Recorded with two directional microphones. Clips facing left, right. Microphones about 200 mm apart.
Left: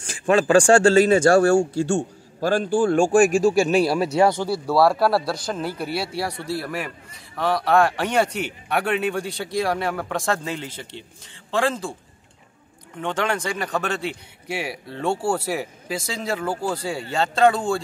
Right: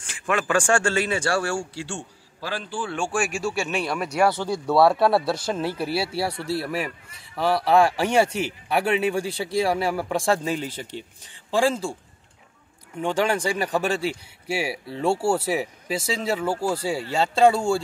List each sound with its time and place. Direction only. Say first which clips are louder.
0.0 s speech: left 7 dB; 35° left (ahead or behind); by 4.6 s 15° left (ahead or behind)
4.6 s a man's voice: right 1 dB; centre (ahead or behind)
13.0 s a man's voice: right 2 dB; 10° right (ahead or behind)